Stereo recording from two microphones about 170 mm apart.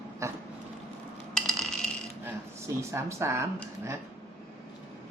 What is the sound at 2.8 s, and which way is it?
Speech, 15° right (ahead or behind).